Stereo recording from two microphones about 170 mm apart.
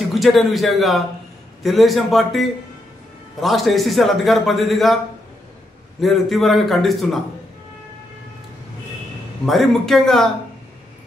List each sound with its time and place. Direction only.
0.1 s a man's voice: centre (ahead or behind)
9.5 s a man's voice: centre (ahead or behind)